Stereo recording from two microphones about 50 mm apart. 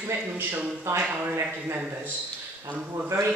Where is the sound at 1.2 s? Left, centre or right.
Right.